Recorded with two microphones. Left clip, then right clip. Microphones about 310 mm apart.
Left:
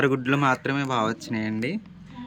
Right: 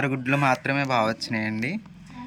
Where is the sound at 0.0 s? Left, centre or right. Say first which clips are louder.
Left 1 dB; centre.